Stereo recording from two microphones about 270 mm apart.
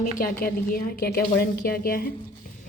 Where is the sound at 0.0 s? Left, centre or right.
Left.